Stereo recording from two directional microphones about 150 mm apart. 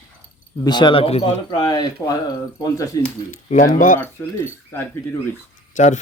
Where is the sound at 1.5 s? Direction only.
30° left (ahead or behind).